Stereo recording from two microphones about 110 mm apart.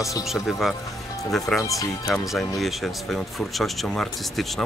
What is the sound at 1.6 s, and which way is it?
Speech, 30° left (ahead or behind).